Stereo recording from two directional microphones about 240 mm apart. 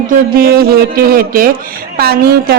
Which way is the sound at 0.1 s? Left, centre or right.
Right.